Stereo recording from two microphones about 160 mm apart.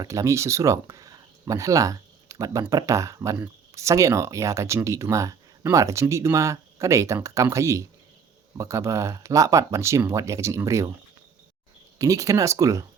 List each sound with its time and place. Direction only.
0.0 s speech: 20° right (ahead or behind)
11.9 s speech: 20° right (ahead or behind)